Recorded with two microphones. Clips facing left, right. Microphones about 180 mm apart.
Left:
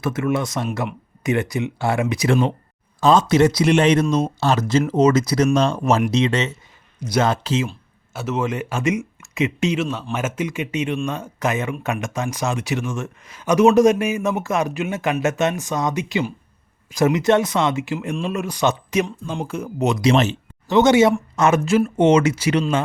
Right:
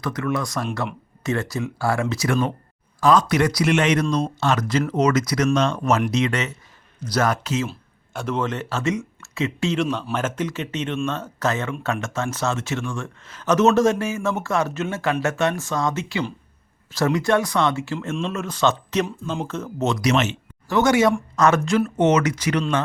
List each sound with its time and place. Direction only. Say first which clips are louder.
0.0 s speech: left 3 dB; 25° left (ahead or behind)
4.0 s speech: left 3 dB; 5° left (ahead or behind)
4.4 s speech: left 3 dB; 30° left (ahead or behind)
7.7 s speech: right 2 dB; 5° left (ahead or behind)
9.7 s speech: right 1 dB; 5° left (ahead or behind); by 20.3 s 30° left (ahead or behind)
20.7 s speech: left 4 dB; 20° left (ahead or behind)
22.5 s speech: left 1 dB; 10° left (ahead or behind)